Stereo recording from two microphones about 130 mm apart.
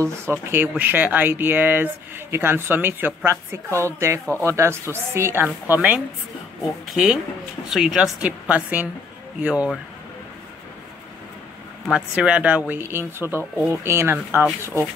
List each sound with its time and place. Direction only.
0.0 s a woman's voice: 20° right (ahead or behind)
11.9 s a woman's voice: 10° right (ahead or behind)